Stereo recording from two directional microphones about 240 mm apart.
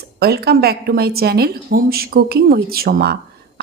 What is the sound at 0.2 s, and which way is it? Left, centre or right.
A woman's voice, right.